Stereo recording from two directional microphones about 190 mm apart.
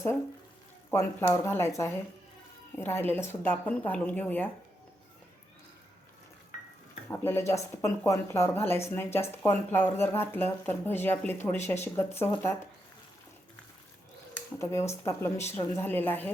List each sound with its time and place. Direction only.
0.9 s speech: 15° left (ahead or behind)
6.5 s a sound: 40° left (ahead or behind)
7.1 s speech: 10° left (ahead or behind)
14.3 s speech: 15° left (ahead or behind)